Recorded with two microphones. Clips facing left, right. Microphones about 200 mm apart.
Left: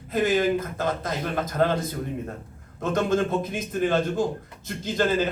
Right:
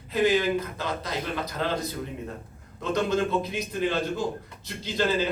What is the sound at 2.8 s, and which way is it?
A man's voice, 50° left (ahead or behind).